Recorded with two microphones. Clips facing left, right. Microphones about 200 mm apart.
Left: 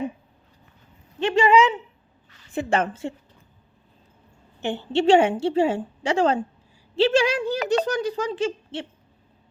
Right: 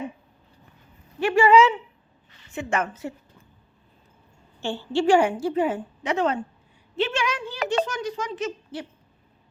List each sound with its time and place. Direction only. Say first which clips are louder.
1.2 s speech: right 1 dB; 20° left (ahead or behind)
2.5 s a child's voice: left 4 dB; 35° left (ahead or behind)
4.6 s a woman's voice: left 2 dB; 20° left (ahead or behind)